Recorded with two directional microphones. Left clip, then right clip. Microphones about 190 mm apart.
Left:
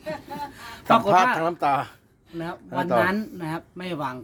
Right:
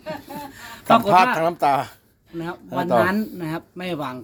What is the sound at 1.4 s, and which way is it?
Speech, 35° right (ahead or behind).